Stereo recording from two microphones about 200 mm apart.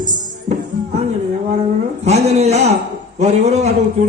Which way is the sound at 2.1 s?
35° right (ahead or behind).